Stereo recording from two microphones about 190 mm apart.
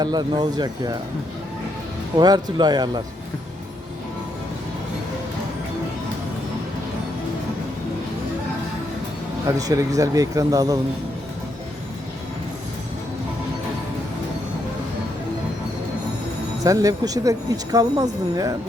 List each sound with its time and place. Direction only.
0.0 s speech: 20° right (ahead or behind)
2.1 s speech: 20° right (ahead or behind)
9.6 s speech: 20° right (ahead or behind)
16.6 s speech: 20° right (ahead or behind)